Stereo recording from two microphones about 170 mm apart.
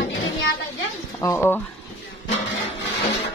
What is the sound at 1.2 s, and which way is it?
Speech, 15° left (ahead or behind).